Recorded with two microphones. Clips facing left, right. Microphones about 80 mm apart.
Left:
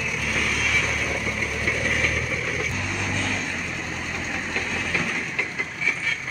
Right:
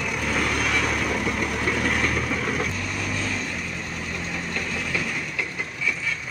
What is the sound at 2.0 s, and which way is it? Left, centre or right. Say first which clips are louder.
Vehicle: right 2 dB; right.